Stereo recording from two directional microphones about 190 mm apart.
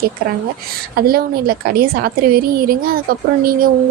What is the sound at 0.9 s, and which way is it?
Speech, 50° right (ahead or behind).